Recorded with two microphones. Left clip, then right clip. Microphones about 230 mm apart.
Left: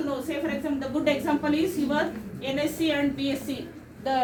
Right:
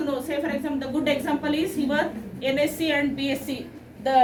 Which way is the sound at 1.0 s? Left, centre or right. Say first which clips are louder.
Even; right.